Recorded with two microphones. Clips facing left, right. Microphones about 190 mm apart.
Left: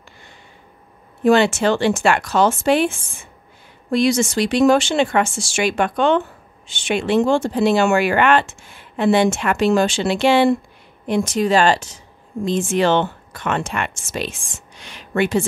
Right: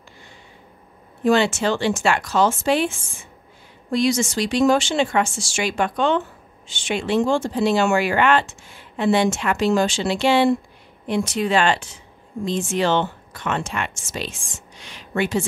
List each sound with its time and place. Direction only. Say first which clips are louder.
1.2 s speech: left 3 dB; 60° left (ahead or behind)
11.1 s speech: left 3 dB; 45° left (ahead or behind)
12.4 s speech: left 4 dB; 55° left (ahead or behind)